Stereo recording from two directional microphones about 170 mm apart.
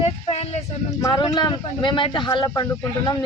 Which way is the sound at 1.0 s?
25° left (ahead or behind).